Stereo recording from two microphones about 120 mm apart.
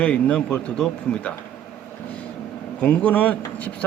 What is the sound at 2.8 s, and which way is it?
Speech, 10° left (ahead or behind).